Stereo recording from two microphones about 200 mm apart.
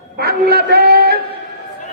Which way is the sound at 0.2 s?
55° right (ahead or behind).